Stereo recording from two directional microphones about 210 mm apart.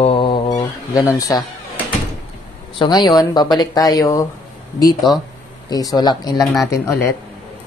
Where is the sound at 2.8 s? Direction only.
20° left (ahead or behind).